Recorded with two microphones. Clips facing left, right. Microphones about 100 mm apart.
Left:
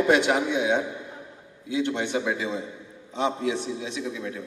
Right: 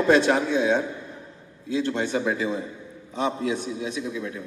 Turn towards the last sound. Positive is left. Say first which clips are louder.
# right 1 dB
turn(degrees=25)  # may be behind; listen again after turning